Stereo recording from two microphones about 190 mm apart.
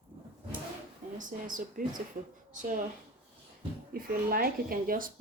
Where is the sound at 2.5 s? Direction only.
45° right (ahead or behind).